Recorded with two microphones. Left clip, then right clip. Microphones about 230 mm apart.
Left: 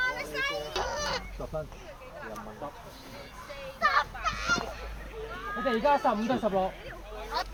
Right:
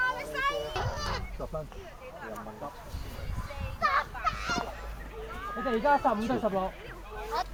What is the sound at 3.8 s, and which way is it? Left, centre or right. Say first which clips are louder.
Fowl: left 1 dB; left.